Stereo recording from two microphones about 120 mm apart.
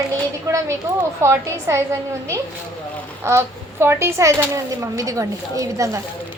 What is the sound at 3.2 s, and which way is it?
A woman's voice, 20° right (ahead or behind).